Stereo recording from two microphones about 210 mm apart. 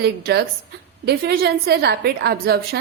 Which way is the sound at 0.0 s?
50° right (ahead or behind).